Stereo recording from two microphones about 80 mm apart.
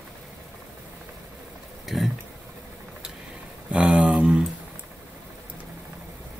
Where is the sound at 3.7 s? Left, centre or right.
Centre.